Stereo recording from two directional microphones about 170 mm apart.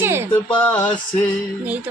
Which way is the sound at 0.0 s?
15° right (ahead or behind).